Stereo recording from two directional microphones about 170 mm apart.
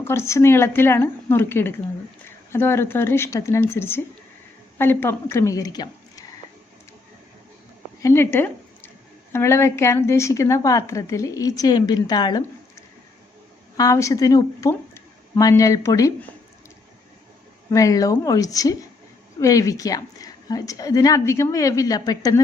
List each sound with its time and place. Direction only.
0.0 s a woman's voice: 15° left (ahead or behind)
8.0 s a woman's voice: 15° left (ahead or behind)
17.7 s a woman's voice: 20° left (ahead or behind)